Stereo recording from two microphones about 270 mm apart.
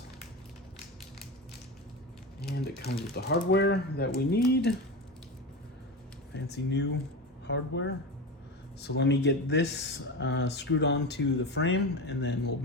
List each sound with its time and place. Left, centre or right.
2.4 s speech: left
6.3 s speech: left